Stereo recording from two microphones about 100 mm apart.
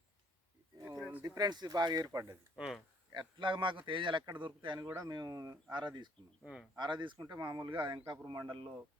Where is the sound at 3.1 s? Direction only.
55° right (ahead or behind).